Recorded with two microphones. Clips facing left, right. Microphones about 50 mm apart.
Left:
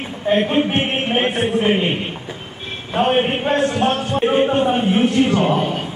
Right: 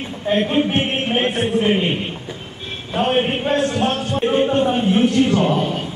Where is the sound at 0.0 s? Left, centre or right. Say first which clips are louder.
Left 2 dB; centre.